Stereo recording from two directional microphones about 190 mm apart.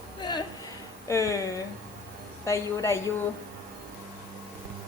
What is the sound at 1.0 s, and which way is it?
A woman's voice, 15° left (ahead or behind).